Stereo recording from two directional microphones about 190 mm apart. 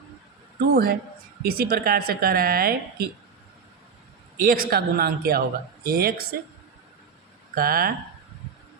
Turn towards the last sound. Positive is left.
turn(degrees=-50)  # may be behind; listen again after turning